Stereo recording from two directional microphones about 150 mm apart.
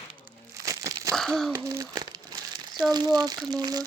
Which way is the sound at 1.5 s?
15° right (ahead or behind).